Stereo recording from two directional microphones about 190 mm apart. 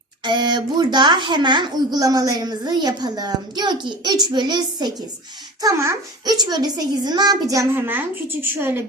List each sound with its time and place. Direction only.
0.3 s a woman's voice: 25° right (ahead or behind)